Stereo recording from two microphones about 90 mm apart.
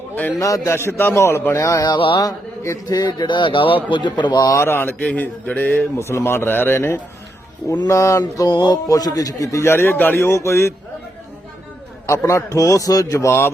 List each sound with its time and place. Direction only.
0.3 s a man's voice: 40° left (ahead or behind); by 3.8 s 70° left (ahead or behind)
3.9 s a man's voice: 60° left (ahead or behind)
4.4 s a man's voice: 30° left (ahead or behind)
6.0 s a man's voice: 30° left (ahead or behind)
8.2 s a man's voice: 55° left (ahead or behind); by 10.8 s 30° left (ahead or behind)
12.0 s a man's voice: 35° left (ahead or behind)